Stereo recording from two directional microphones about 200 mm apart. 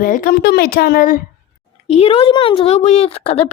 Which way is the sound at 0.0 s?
45° left (ahead or behind).